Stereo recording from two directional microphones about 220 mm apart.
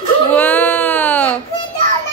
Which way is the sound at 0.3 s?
5° left (ahead or behind).